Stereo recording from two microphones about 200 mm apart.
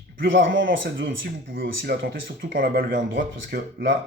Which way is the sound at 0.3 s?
65° right (ahead or behind).